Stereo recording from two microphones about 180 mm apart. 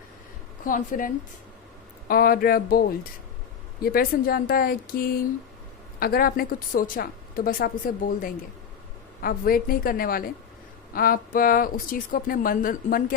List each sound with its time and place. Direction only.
0.6 s a woman's voice: 50° left (ahead or behind)